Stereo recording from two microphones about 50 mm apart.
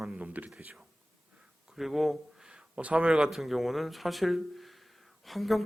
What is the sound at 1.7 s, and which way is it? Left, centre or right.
Speech, centre.